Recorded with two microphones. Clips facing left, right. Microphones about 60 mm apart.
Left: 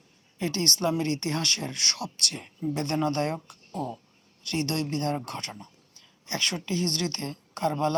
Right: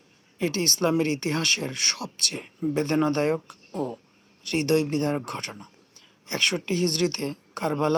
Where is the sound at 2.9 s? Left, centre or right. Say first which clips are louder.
Right 4 dB; right.